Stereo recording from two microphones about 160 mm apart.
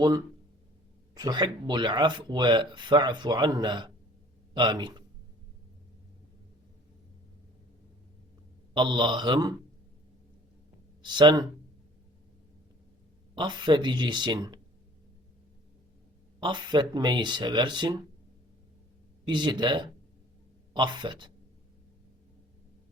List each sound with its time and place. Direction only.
1.1 s speech: 25° right (ahead or behind)
8.7 s speech: 30° right (ahead or behind)
11.0 s speech: 30° right (ahead or behind)
13.3 s speech: 30° right (ahead or behind)
16.4 s speech: 30° right (ahead or behind)
19.2 s speech: 30° right (ahead or behind)